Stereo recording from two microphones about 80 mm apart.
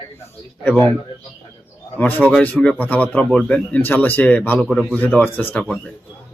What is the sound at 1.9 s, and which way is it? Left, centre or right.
A man's voice, left.